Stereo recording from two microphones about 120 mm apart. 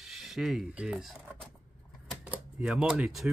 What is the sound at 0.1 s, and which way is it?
Speech, 5° right (ahead or behind).